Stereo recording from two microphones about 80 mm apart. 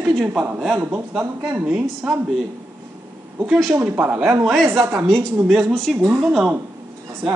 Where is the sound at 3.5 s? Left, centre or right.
Centre.